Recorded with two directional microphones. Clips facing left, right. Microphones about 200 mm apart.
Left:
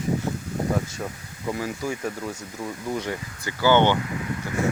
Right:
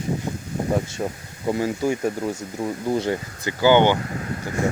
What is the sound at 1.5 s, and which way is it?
Speech, 25° right (ahead or behind).